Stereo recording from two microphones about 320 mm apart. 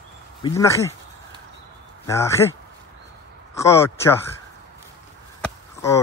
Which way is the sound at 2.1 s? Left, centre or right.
Centre.